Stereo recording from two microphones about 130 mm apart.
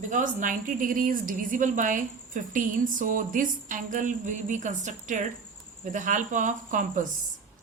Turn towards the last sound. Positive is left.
turn(degrees=-80)